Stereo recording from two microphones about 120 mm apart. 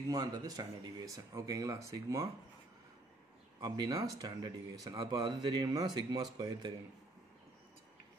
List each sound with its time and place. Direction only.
0.1 s speech: 30° right (ahead or behind)
3.6 s a man's voice: 35° right (ahead or behind)